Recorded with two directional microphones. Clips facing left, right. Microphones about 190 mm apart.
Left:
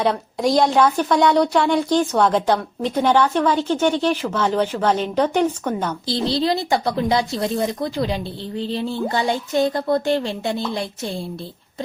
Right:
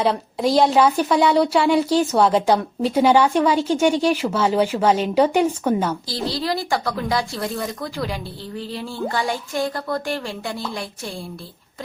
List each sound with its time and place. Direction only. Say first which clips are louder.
0.0 s speech: even; centre (ahead or behind)
6.2 s speech: left 3 dB; 25° left (ahead or behind)